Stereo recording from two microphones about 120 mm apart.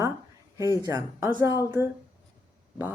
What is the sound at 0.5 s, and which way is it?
Speech, 30° left (ahead or behind).